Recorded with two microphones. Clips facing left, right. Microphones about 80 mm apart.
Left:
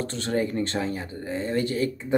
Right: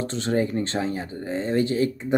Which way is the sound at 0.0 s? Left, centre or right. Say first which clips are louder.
Right 2 dB; right.